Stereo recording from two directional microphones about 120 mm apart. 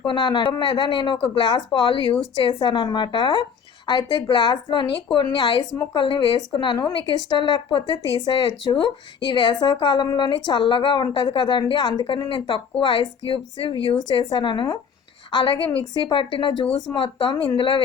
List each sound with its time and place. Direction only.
0.0 s a woman's voice: 40° left (ahead or behind)